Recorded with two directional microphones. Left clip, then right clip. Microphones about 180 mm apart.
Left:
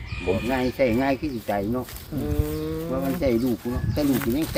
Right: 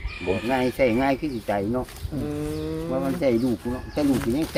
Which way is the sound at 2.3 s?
50° left (ahead or behind).